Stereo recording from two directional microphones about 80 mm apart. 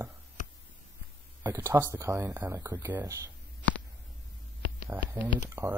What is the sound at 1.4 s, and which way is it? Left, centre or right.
Speech, right.